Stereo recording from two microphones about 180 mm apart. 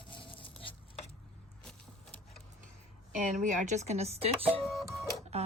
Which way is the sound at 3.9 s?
35° right (ahead or behind).